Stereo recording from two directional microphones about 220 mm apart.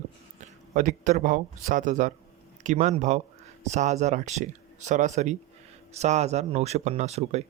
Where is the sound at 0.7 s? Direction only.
35° right (ahead or behind).